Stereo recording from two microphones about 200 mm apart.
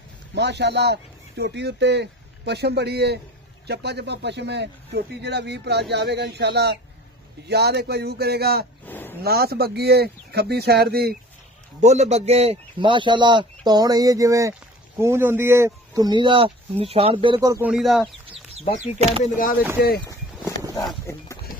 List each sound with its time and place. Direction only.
0.3 s speech: 60° right (ahead or behind)
8.8 s a sound: 10° left (ahead or behind)
9.2 s speech: 50° right (ahead or behind)
11.8 s a man's voice: 35° right (ahead or behind); by 17.6 s 15° right (ahead or behind)
17.6 s speech: centre (ahead or behind)
18.8 s speech: 35° right (ahead or behind)
21.0 s a sound: 15° left (ahead or behind)